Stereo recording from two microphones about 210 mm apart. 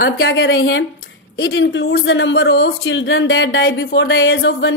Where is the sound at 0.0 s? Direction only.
50° left (ahead or behind).